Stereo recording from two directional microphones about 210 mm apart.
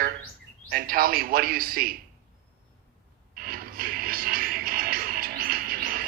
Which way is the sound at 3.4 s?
45° right (ahead or behind).